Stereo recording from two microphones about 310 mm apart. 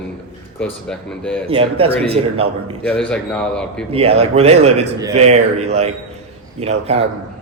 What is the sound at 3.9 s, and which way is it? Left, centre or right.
Speech, centre.